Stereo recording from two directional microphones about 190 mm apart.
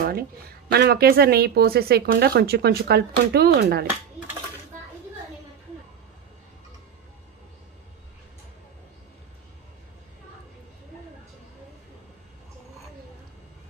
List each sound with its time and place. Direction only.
0.0 s speech: 50° right (ahead or behind)